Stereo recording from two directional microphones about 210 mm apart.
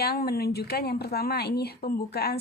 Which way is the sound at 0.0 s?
45° left (ahead or behind).